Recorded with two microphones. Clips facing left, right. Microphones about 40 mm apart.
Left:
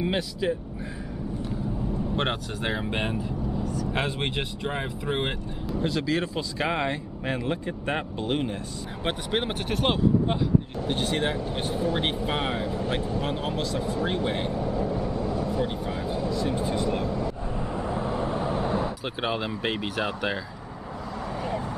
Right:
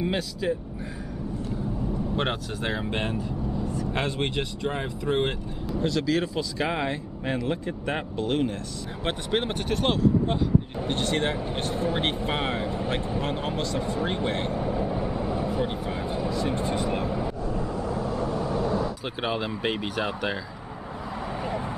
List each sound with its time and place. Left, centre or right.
0.0 s speech: centre
2.1 s speech: centre
3.6 s vehicle: right
3.9 s speech: centre
9.0 s speech: centre
14.5 s vehicle: centre
17.6 s vehicle: left
19.2 s speech: centre